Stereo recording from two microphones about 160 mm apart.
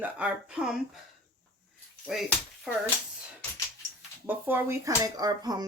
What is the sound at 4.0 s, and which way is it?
Speech, 10° right (ahead or behind).